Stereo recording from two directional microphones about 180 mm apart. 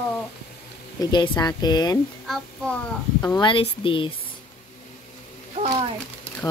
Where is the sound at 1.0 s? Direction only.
25° left (ahead or behind).